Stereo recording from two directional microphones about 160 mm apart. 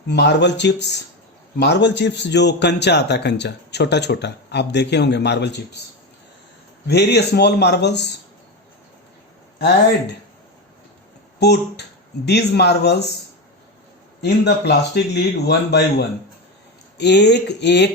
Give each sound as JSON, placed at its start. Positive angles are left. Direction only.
{"t": 0.1, "sound": "a man's voice", "side_deg": 90}
{"t": 6.8, "sound": "a man's voice", "side_deg": 90}
{"t": 9.6, "sound": "a man's voice", "side_deg": 90}
{"t": 11.3, "sound": "a man's voice", "side_deg": 90}
{"t": 14.2, "sound": "a man's voice", "side_deg": 90}